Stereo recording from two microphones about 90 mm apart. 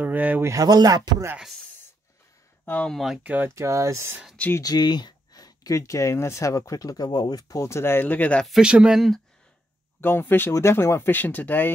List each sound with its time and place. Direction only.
0.0 s a sound: 20° right (ahead or behind)
0.4 s speech: 40° right (ahead or behind)
2.6 s speech: 15° left (ahead or behind)
2.9 s speech: centre (ahead or behind)
3.3 s speech: 20° right (ahead or behind)
3.5 s speech: 35° right (ahead or behind)
4.6 s speech: 45° left (ahead or behind); by 8.5 s 15° left (ahead or behind)
8.5 s speech: 10° right (ahead or behind)
9.9 s speech: 25° left (ahead or behind)